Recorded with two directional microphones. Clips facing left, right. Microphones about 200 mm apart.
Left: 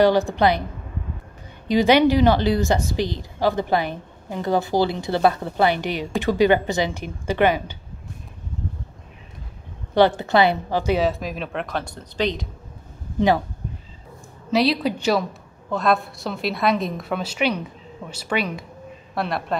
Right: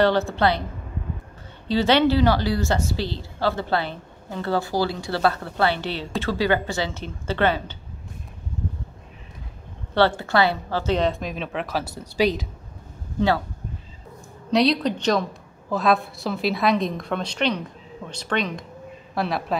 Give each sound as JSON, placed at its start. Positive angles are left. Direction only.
{"t": 0.0, "sound": "speech", "side_deg": 15}
{"t": 1.7, "sound": "speech", "side_deg": 15}
{"t": 9.9, "sound": "a woman's voice", "side_deg": 15}
{"t": 14.5, "sound": "a woman's voice", "side_deg": 5}